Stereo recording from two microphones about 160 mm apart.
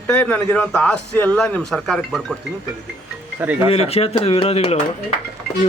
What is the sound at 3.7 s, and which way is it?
Speech, 40° left (ahead or behind).